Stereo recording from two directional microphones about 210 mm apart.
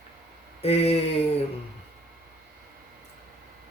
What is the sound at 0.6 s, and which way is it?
Speech, 30° left (ahead or behind).